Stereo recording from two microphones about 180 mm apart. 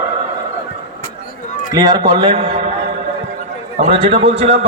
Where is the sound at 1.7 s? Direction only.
20° right (ahead or behind).